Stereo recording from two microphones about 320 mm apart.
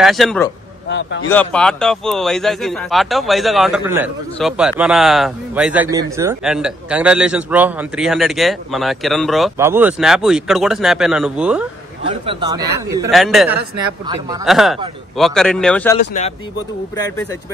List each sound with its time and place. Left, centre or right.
0.0 s a man's voice: centre
0.8 s speech: left
1.3 s a man's voice: centre
12.0 s a man's voice: centre
14.0 s a man's voice: centre
14.4 s a man's voice: centre
16.1 s speech: left